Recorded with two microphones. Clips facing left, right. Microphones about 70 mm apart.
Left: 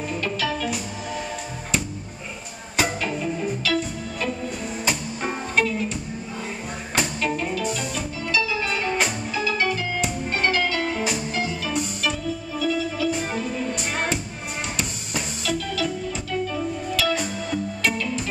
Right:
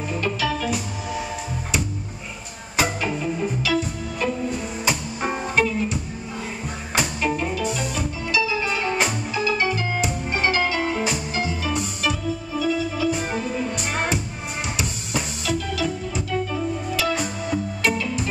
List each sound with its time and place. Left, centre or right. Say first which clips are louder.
0.1 s music: right 3 dB; centre
2.8 s music: right 1 dB; centre
7.0 s music: right 1 dB; centre